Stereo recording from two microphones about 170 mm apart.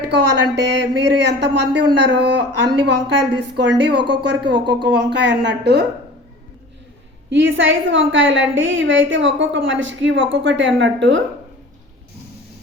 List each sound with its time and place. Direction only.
0.1 s a woman's voice: 90° right
7.3 s a woman's voice: 90° right